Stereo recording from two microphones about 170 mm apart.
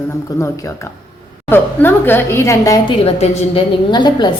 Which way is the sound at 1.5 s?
10° left (ahead or behind).